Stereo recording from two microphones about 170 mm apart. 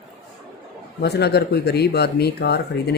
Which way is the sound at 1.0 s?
75° left (ahead or behind).